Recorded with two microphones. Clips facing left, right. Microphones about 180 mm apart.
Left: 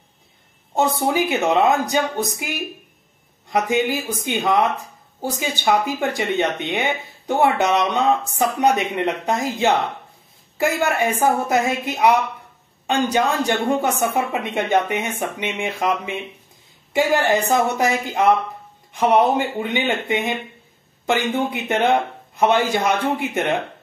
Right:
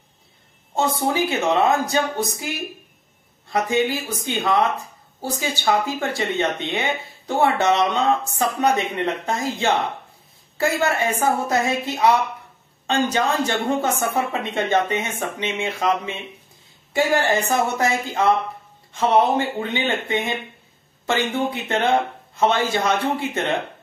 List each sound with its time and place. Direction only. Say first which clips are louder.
0.7 s speech: left 2 dB; 15° left (ahead or behind)
16.9 s speech: left 2 dB; 20° left (ahead or behind)